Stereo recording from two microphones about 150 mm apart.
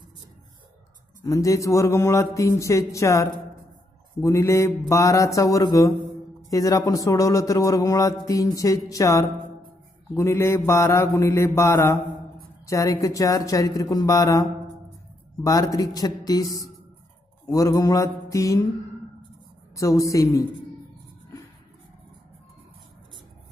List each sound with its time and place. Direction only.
1.2 s speech: 20° left (ahead or behind)
10.1 s mantra: 15° left (ahead or behind)
12.6 s speech: 20° left (ahead or behind)
19.7 s speech: 20° left (ahead or behind)